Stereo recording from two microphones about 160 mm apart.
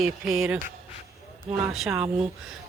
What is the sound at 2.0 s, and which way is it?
Speech, 40° right (ahead or behind).